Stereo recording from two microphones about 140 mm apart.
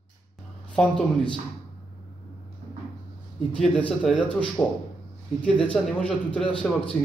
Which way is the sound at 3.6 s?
5° left (ahead or behind).